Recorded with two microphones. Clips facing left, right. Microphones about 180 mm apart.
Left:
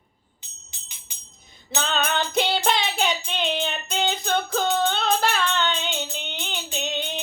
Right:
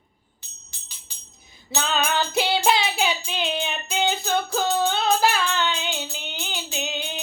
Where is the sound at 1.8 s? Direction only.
5° right (ahead or behind).